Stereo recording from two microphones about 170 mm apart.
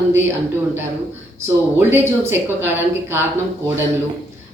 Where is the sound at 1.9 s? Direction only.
15° right (ahead or behind).